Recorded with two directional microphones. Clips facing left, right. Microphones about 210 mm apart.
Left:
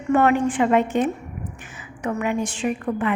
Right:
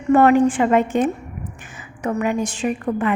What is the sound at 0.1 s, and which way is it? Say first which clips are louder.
A woman's voice: right 5 dB; 35° right (ahead or behind).